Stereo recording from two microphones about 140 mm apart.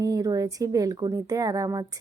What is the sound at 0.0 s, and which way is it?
Speech, 25° right (ahead or behind).